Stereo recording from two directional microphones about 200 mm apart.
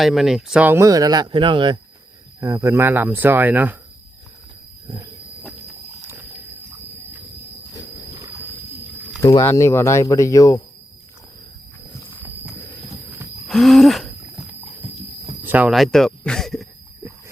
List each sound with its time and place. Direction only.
0.0 s speech: centre (ahead or behind)
5.4 s a sound: centre (ahead or behind)
9.2 s speech: 15° left (ahead or behind)
13.5 s speech: centre (ahead or behind)
15.4 s speech: 5° right (ahead or behind)